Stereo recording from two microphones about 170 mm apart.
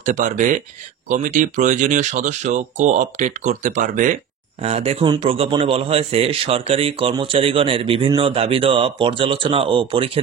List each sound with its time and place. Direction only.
0.0 s speech: 45° right (ahead or behind)
4.6 s a man's voice: 35° right (ahead or behind)